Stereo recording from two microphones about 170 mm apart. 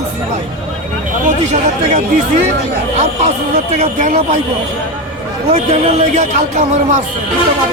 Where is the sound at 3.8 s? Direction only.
45° right (ahead or behind).